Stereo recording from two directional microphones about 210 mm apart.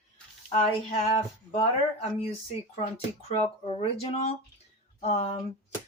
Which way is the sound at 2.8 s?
30° left (ahead or behind).